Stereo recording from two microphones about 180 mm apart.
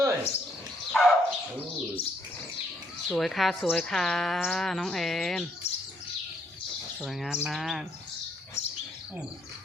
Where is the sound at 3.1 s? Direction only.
Centre (ahead or behind).